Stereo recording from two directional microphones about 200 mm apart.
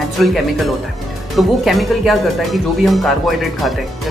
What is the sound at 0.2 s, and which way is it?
Speech, centre (ahead or behind).